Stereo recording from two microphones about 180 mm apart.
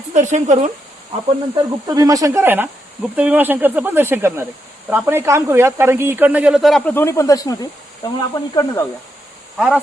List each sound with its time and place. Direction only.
0.1 s speech: 40° right (ahead or behind)
1.5 s speech: 20° right (ahead or behind); by 8.1 s 20° left (ahead or behind)
8.5 s snake: 15° left (ahead or behind)
9.6 s speech: 5° right (ahead or behind)